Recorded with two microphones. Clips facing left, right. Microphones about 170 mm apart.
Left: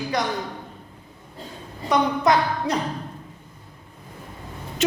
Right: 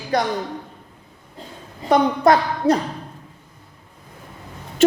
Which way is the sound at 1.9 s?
50° right (ahead or behind).